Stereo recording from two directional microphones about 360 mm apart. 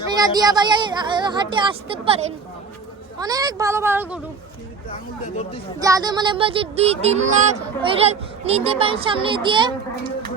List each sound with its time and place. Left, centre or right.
0.2 s speech: centre
3.2 s speech: centre
4.9 s speech: centre
5.8 s speech: centre